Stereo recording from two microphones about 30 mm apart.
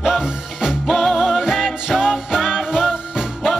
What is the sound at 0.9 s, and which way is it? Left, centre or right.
Music, centre.